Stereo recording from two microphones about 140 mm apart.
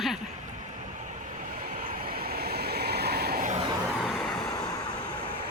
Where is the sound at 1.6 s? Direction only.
80° right.